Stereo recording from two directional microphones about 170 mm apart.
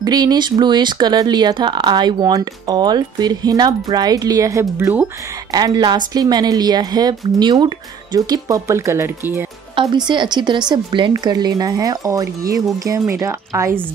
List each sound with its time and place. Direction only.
0.0 s speech: 25° right (ahead or behind)
9.8 s speech: 25° right (ahead or behind)